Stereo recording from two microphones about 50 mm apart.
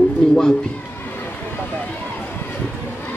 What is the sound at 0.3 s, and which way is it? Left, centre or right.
Speech, centre.